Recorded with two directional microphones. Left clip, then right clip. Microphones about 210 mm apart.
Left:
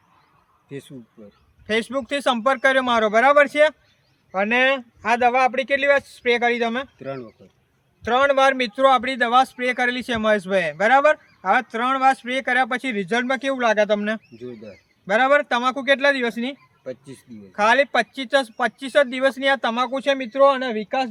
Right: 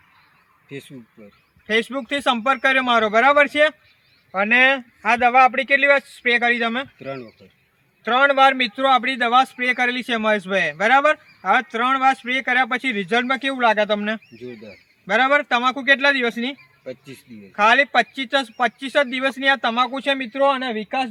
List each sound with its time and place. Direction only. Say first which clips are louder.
0.7 s speech: even; centre (ahead or behind)
1.6 s a man's voice: right 2 dB; 15° left (ahead or behind)
7.0 s speech: even; 5° right (ahead or behind)
8.0 s a man's voice: right 2 dB; 25° left (ahead or behind)
14.4 s speech: even; centre (ahead or behind)
15.0 s a man's voice: even; 20° left (ahead or behind)
16.8 s speech: left 1 dB; centre (ahead or behind)
17.5 s a man's voice: right 2 dB; 20° left (ahead or behind)